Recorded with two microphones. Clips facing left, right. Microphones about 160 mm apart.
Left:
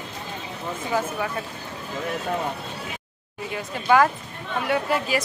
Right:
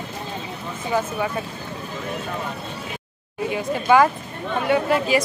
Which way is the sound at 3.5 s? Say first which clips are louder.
Right 3 dB; 5° right (ahead or behind).